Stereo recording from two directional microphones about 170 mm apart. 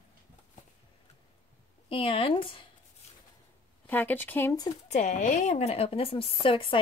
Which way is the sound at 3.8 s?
10° left (ahead or behind).